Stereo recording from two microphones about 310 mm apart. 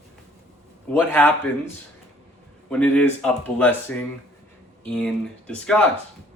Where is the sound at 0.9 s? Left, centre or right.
Centre.